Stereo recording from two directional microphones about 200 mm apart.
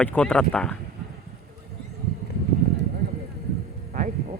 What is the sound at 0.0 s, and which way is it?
Speech, 5° left (ahead or behind).